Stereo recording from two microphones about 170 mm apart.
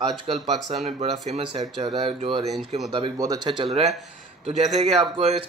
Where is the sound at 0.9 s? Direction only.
40° right (ahead or behind).